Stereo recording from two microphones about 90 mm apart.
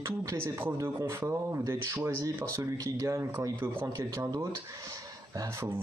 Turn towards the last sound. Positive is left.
turn(degrees=-40)  # may be behind; listen again after turning